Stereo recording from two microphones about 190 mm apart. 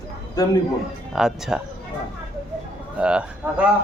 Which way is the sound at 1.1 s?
5° right (ahead or behind).